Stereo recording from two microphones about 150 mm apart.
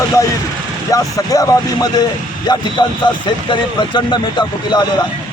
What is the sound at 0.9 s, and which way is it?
Speech, 25° left (ahead or behind).